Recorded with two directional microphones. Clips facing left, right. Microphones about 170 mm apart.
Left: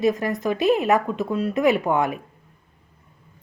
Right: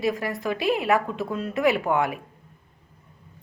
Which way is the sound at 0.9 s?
20° left (ahead or behind).